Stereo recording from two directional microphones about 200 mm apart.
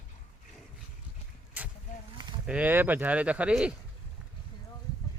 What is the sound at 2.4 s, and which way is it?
Speech, 5° right (ahead or behind).